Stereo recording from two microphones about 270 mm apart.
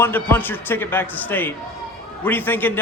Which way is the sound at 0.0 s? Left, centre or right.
Centre.